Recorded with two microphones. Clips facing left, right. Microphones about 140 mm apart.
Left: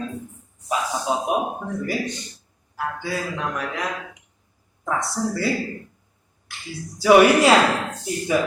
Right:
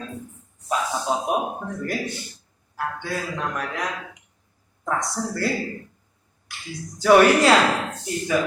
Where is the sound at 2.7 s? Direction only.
5° left (ahead or behind).